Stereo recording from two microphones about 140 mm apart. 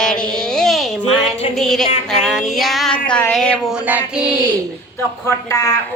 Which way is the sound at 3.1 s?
10° left (ahead or behind).